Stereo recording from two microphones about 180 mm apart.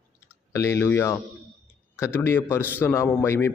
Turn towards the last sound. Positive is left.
turn(degrees=15)  # may be behind; listen again after turning